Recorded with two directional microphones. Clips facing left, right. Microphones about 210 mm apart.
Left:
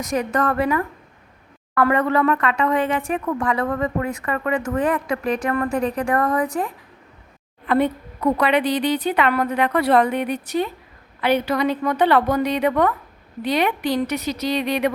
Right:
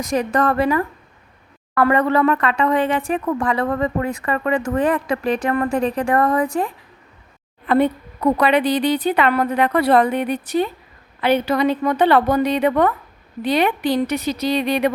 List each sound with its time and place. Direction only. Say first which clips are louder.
0.0 s speech: right 3 dB; 30° right (ahead or behind)
7.7 s a woman's voice: right 2 dB; 35° right (ahead or behind)